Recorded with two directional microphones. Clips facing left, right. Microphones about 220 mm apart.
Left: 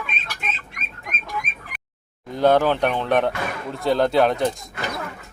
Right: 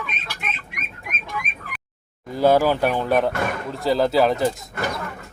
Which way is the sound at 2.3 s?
5° right (ahead or behind).